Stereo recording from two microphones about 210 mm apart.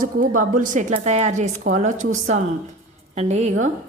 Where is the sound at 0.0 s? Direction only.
40° right (ahead or behind).